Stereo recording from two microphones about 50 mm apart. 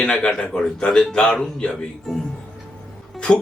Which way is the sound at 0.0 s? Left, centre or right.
Centre.